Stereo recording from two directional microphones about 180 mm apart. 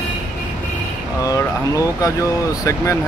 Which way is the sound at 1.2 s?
20° left (ahead or behind).